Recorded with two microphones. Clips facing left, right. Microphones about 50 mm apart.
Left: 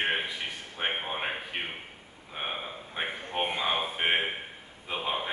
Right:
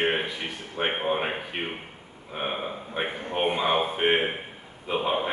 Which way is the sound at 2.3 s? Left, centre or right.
Centre.